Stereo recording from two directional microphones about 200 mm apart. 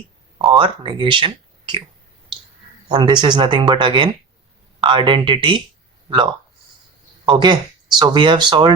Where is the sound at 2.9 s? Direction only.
20° right (ahead or behind).